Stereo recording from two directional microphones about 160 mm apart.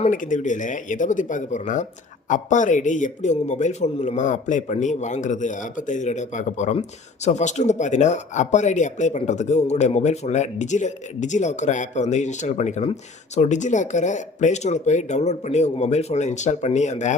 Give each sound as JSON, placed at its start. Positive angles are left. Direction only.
{"t": 0.0, "sound": "speech", "side_deg": 55}